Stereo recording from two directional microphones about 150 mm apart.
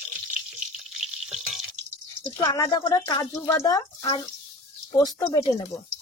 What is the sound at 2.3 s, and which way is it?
A woman's voice, 25° left (ahead or behind).